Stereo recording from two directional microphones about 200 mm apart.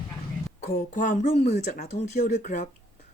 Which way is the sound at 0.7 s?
40° left (ahead or behind).